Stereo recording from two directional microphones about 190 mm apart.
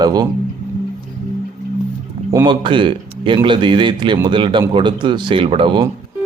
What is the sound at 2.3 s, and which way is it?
Speech, 25° right (ahead or behind).